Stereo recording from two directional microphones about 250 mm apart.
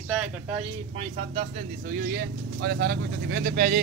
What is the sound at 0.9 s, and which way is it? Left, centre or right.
A man's voice, right.